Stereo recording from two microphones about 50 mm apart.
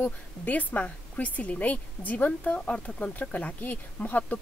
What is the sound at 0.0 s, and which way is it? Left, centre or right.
Speech, left.